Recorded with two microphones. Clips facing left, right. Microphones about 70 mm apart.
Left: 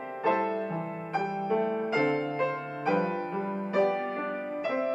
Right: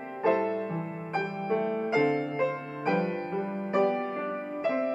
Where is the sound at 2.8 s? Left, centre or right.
Centre.